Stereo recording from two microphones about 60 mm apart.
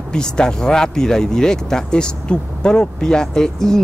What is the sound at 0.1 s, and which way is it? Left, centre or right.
Speech, centre.